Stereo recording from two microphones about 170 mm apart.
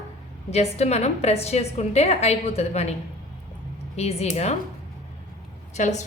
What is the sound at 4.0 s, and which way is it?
Speech, 40° left (ahead or behind).